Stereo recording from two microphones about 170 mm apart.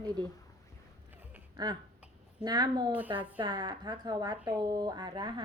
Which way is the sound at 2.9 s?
10° right (ahead or behind).